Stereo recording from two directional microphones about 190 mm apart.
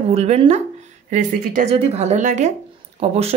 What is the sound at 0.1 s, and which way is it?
A woman's voice, 35° right (ahead or behind).